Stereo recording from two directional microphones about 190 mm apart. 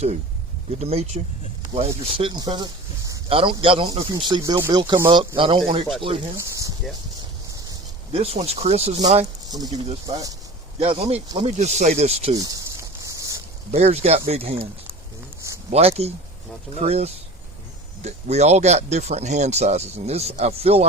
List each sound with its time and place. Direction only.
0.7 s speech: 35° right (ahead or behind)
6.3 s a sound: 15° right (ahead or behind)
8.1 s speech: 30° right (ahead or behind)
9.5 s speech: 20° right (ahead or behind)
10.8 s speech: 30° right (ahead or behind)
12.3 s a sound: 20° right (ahead or behind)
13.7 s speech: 35° right (ahead or behind)
15.7 s speech: 35° right (ahead or behind)